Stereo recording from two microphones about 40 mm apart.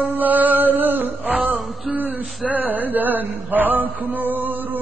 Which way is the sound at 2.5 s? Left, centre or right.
Right.